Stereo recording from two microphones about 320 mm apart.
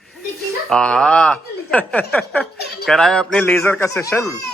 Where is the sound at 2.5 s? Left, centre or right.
Left.